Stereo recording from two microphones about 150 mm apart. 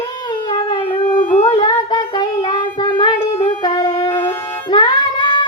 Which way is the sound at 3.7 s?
25° left (ahead or behind).